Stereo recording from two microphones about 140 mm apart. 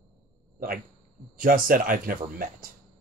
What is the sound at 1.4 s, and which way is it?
Speech, 85° right.